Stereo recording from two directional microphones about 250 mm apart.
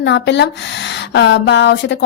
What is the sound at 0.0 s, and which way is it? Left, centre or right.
A woman's voice, left.